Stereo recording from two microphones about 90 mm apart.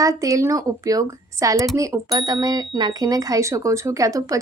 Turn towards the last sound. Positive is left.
turn(degrees=-40)  # may be behind; listen again after turning